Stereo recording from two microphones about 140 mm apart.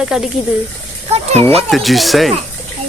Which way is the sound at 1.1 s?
50° right (ahead or behind).